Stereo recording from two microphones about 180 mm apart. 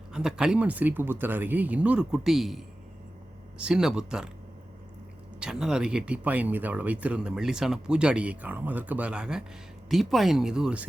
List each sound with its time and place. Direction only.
0.1 s speech: 5° right (ahead or behind)
5.4 s speech: 5° right (ahead or behind)